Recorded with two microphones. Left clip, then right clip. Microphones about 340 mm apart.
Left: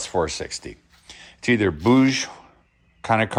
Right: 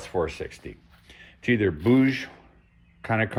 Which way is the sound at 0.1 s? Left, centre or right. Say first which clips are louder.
Left 3 dB; left.